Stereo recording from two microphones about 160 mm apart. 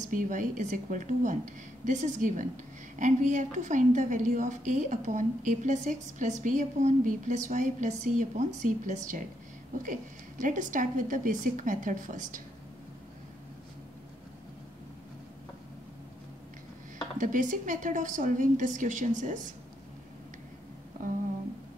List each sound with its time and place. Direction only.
0.0 s speech: 55° right (ahead or behind)
10.4 s a woman's voice: 55° right (ahead or behind)
17.2 s speech: 55° right (ahead or behind)